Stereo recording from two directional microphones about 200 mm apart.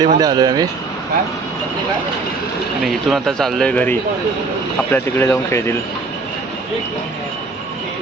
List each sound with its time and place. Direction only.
0.0 s speech: 20° right (ahead or behind)
2.8 s speech: centre (ahead or behind)